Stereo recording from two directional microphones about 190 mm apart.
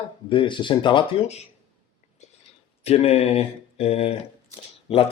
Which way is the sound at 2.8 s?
30° left (ahead or behind).